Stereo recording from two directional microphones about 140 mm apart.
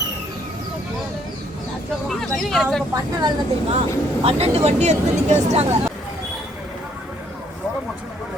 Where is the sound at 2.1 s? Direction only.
5° left (ahead or behind).